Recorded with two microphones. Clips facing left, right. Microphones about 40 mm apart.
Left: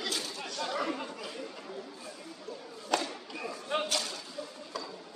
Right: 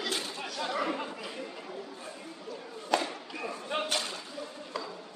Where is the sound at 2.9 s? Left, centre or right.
Centre.